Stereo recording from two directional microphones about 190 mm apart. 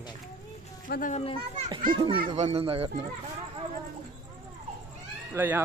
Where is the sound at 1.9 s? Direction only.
30° right (ahead or behind).